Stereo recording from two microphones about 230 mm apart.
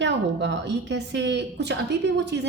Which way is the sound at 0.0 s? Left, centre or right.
Right.